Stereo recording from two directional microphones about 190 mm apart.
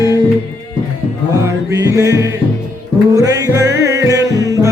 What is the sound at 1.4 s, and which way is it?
Music, 15° right (ahead or behind).